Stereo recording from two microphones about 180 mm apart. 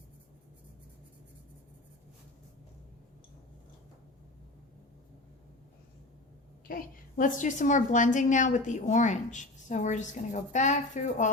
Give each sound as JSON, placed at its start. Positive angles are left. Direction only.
{"t": 6.7, "sound": "a woman's voice", "side_deg": 50}